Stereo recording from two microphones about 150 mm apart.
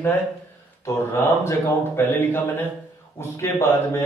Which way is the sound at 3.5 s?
20° left (ahead or behind).